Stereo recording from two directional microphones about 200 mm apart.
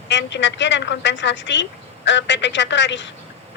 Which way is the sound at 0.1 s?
65° left (ahead or behind).